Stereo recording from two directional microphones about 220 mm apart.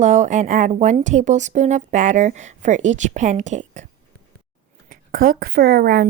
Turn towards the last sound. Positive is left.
turn(degrees=-40)  # may be behind; listen again after turning